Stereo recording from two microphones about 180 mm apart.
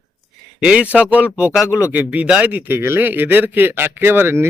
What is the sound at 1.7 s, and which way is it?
Speech, 15° left (ahead or behind).